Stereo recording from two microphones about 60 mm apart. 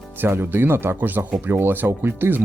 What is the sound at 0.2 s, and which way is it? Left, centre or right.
Speech, right.